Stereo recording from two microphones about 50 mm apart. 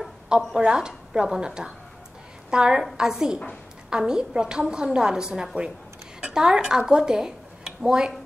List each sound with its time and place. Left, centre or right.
0.6 s a woman's voice: centre